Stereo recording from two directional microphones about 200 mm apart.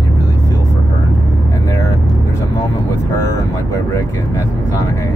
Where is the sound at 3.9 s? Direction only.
15° left (ahead or behind).